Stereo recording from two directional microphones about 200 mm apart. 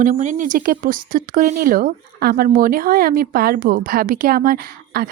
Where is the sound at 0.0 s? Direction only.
40° right (ahead or behind).